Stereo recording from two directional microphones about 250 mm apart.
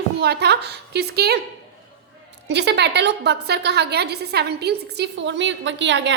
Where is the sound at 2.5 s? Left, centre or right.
Right.